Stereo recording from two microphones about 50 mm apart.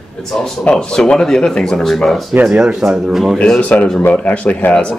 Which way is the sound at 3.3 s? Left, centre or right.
Left.